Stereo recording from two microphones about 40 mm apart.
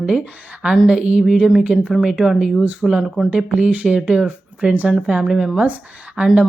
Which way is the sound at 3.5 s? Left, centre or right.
Right.